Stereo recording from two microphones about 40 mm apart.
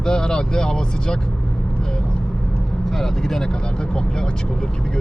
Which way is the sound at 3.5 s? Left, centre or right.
Left.